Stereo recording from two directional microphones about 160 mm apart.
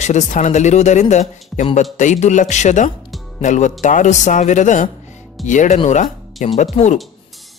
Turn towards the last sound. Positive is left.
turn(degrees=45)  # may be behind; listen again after turning